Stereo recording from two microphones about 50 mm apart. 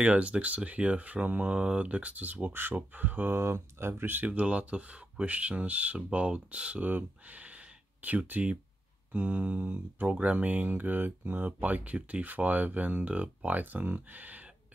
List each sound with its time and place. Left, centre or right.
0.0 s speech: right
3.3 s speech: right
4.3 s speech: right